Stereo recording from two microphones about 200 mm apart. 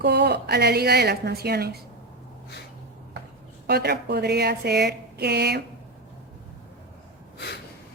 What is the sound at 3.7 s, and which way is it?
A woman's voice, 55° right (ahead or behind).